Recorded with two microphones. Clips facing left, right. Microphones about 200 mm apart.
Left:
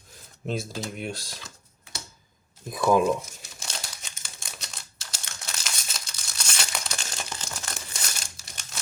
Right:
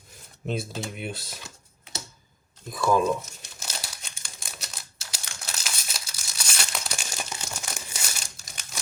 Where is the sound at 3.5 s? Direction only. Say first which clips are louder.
Right 1 dB; centre (ahead or behind).